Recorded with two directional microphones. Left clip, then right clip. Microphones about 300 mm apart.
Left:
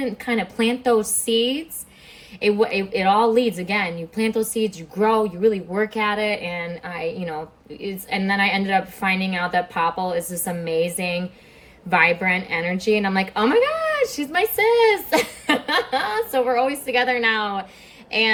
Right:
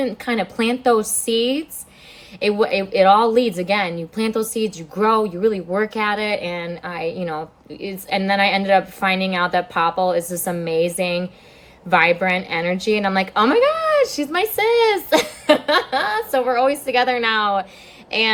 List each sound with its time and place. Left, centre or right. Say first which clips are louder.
0.0 s speech: right 2 dB; centre